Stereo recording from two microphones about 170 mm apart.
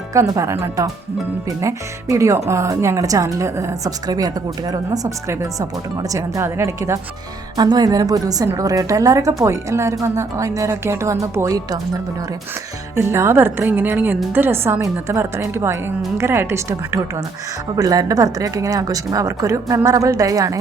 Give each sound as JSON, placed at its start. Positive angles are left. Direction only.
{"t": 0.1, "sound": "a woman's voice", "side_deg": -20}
{"t": 5.3, "sound": "a woman's voice", "side_deg": -20}
{"t": 13.0, "sound": "a woman's voice", "side_deg": -15}